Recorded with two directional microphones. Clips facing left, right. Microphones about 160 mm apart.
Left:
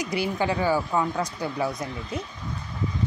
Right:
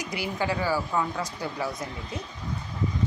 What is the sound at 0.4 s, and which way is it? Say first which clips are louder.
A woman's voice: left 2 dB; 20° left (ahead or behind).